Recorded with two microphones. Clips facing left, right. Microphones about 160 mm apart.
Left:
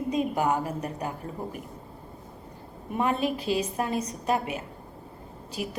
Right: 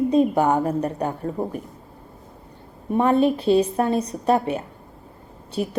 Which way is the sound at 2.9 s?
35° right (ahead or behind).